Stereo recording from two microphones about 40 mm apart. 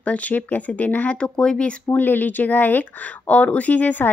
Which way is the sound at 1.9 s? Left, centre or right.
Left.